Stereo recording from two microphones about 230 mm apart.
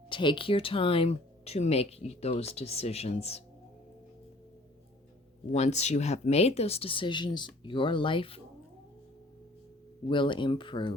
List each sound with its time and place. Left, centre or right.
0.1 s speech: left
5.5 s speech: left
10.1 s speech: left